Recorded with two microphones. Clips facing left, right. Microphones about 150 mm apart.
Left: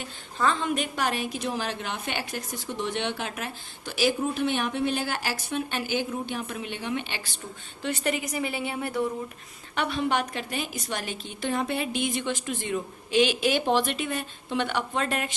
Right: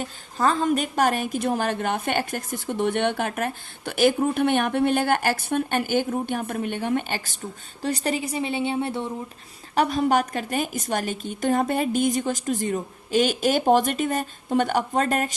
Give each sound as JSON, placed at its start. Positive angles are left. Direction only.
{"t": 0.0, "sound": "a woman's voice", "side_deg": -40}
{"t": 7.8, "sound": "speech", "side_deg": -35}
{"t": 9.7, "sound": "a woman's voice", "side_deg": -40}